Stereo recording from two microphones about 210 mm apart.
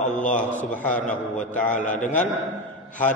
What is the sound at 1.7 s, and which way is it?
Speech, 35° left (ahead or behind).